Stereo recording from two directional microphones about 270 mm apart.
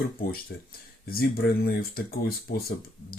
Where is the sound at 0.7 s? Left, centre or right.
Left.